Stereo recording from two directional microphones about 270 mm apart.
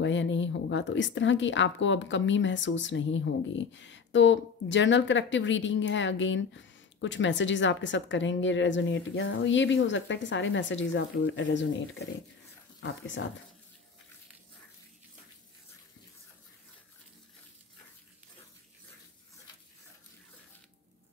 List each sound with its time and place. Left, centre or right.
0.0 s a woman's voice: left